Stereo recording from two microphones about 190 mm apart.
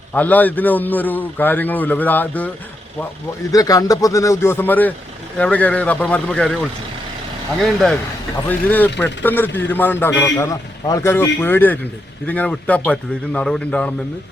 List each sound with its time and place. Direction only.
0.1 s a man's voice: 10° left (ahead or behind)
3.5 s a man's voice: 20° left (ahead or behind)